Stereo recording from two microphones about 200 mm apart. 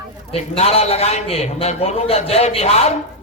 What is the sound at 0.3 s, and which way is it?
A man's voice, 30° left (ahead or behind).